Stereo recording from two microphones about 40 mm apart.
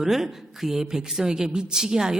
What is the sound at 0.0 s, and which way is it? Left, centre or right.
Speech, centre.